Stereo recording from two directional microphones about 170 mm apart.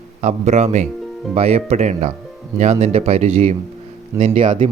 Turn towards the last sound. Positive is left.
turn(degrees=-35)  # may be behind; listen again after turning